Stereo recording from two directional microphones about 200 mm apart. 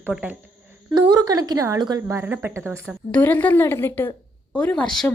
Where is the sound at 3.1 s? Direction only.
10° left (ahead or behind).